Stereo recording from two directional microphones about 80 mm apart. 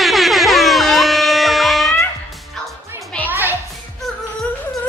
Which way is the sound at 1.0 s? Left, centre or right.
Centre.